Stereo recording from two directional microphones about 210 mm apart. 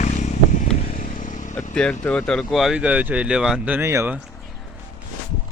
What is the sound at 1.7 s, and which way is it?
Speech, 5° left (ahead or behind).